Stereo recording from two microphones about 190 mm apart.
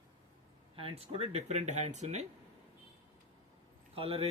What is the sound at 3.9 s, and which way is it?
Speech, 30° right (ahead or behind).